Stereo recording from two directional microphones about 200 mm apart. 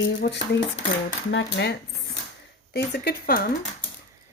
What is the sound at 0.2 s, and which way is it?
A woman's voice, 60° left (ahead or behind).